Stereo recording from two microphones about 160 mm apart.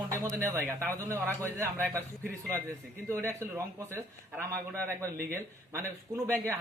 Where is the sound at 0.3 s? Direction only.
15° right (ahead or behind).